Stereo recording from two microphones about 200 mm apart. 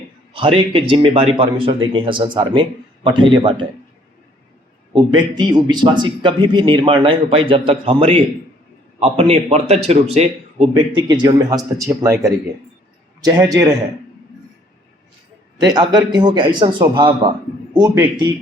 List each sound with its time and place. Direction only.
0.3 s a man's voice: 25° right (ahead or behind)
4.9 s a man's voice: 20° right (ahead or behind)
11.1 s speech: 20° right (ahead or behind)
15.5 s a man's voice: 20° right (ahead or behind)